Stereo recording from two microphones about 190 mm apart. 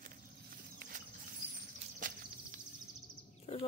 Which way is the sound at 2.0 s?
45° right (ahead or behind).